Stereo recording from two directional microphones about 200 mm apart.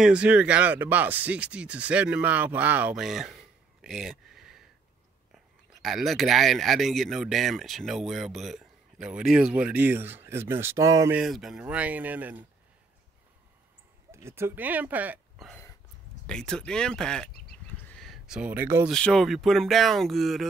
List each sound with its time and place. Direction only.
0.0 s speech: 5° right (ahead or behind)
5.8 s speech: centre (ahead or behind); by 11.1 s 15° right (ahead or behind)
11.1 s speech: centre (ahead or behind)
14.1 s speech: 15° right (ahead or behind); by 17.3 s 5° left (ahead or behind)
17.8 s a sound: centre (ahead or behind)
18.9 s speech: 5° left (ahead or behind)